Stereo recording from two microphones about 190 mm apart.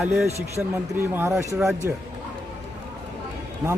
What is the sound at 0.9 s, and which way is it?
Speech, 15° right (ahead or behind).